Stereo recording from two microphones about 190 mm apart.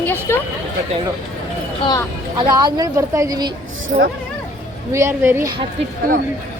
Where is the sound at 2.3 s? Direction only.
25° right (ahead or behind).